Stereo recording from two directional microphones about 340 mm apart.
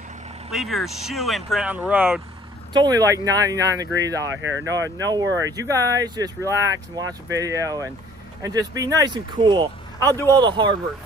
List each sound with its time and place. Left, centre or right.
0.5 s speech: centre
4.3 s speech: right
4.6 s speech: centre